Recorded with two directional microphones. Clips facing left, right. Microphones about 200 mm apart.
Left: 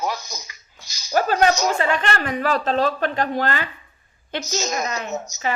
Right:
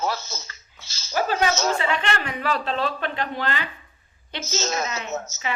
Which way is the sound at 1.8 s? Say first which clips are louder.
Left 3 dB; 45° left (ahead or behind).